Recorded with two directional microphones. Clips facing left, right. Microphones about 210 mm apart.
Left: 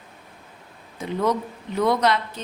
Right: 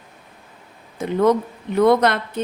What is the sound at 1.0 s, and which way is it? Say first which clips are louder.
A woman's voice: right 6 dB; 50° right (ahead or behind).